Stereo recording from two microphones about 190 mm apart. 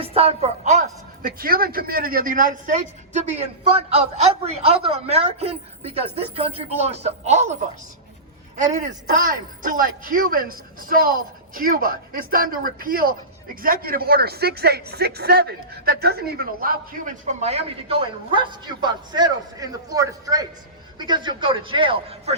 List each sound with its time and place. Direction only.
0.0 s a sound: 30° right (ahead or behind)
1.4 s a woman's voice: 50° right (ahead or behind)
8.8 s a man's voice: 45° right (ahead or behind); by 22.4 s 30° right (ahead or behind)